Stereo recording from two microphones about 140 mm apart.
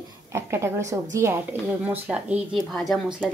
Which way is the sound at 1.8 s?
10° right (ahead or behind).